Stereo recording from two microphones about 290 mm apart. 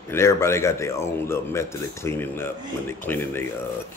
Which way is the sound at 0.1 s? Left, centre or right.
Centre.